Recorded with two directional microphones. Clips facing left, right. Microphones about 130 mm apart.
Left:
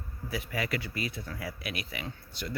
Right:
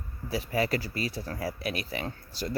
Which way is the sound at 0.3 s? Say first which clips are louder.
Right 5 dB; 30° right (ahead or behind).